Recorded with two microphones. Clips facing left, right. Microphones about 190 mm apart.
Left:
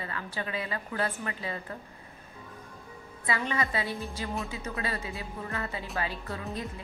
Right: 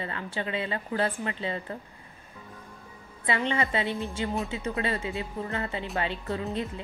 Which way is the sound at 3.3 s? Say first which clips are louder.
Right 3 dB; 25° right (ahead or behind).